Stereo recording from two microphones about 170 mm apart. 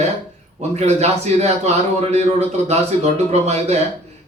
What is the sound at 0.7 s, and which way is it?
A man's voice, 40° right (ahead or behind).